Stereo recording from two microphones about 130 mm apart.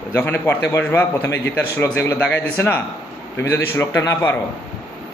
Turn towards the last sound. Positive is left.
turn(degrees=20)  # may be behind; listen again after turning